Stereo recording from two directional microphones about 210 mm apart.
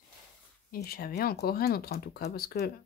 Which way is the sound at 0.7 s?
45° left (ahead or behind).